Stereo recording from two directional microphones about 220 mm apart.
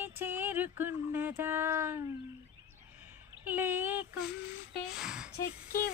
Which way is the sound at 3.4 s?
10° right (ahead or behind).